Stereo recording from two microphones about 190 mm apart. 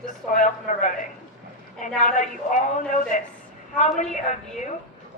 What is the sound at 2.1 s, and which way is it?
Speech, 40° left (ahead or behind).